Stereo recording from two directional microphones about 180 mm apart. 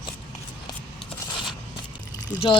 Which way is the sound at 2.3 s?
10° right (ahead or behind).